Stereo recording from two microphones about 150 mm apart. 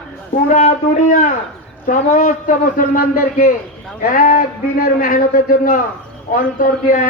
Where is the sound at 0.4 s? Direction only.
50° left (ahead or behind).